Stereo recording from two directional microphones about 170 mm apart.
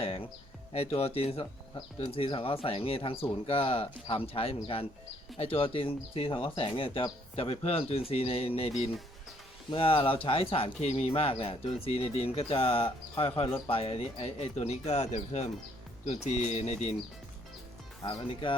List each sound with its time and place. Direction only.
0.0 s music: 35° left (ahead or behind)
0.7 s speech: 35° left (ahead or behind)
18.0 s speech: 25° left (ahead or behind)